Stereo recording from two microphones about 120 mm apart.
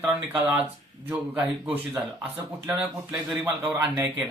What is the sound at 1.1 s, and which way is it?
Speech, 15° right (ahead or behind).